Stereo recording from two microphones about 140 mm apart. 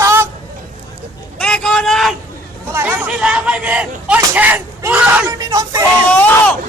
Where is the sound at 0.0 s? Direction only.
20° right (ahead or behind).